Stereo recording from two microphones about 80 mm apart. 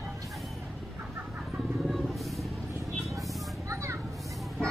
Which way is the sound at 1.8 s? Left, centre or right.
Centre.